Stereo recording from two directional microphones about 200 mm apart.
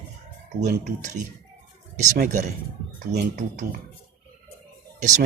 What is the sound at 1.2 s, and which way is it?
Speech, 35° right (ahead or behind).